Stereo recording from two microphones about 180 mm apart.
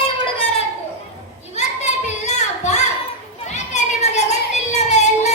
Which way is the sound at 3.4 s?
40° left (ahead or behind).